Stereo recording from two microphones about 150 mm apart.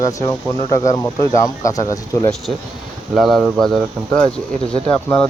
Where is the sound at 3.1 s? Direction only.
Centre (ahead or behind).